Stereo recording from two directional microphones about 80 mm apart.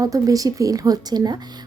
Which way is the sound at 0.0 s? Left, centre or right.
Right.